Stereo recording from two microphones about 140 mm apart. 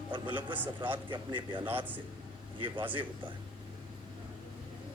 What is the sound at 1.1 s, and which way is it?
Speech, 35° right (ahead or behind).